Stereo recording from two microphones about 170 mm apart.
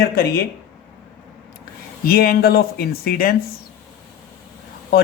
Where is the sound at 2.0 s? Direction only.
60° left (ahead or behind).